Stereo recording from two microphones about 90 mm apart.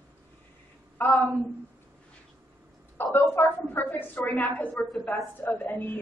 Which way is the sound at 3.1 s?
25° left (ahead or behind).